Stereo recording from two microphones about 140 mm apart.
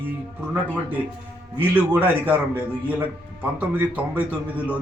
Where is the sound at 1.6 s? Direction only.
10° right (ahead or behind).